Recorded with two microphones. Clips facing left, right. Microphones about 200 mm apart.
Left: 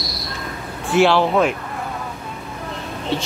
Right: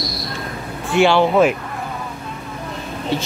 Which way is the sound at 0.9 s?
Centre (ahead or behind).